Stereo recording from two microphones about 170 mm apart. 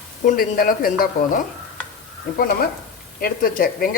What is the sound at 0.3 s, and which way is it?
Speech, 55° left (ahead or behind).